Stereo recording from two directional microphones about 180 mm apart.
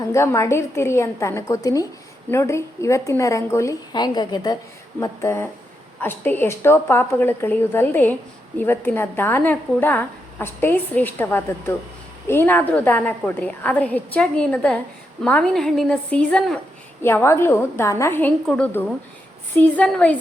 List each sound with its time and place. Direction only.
0.1 s a woman's voice: 15° left (ahead or behind)